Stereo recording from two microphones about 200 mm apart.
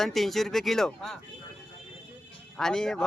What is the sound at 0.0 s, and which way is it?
Speech, centre (ahead or behind).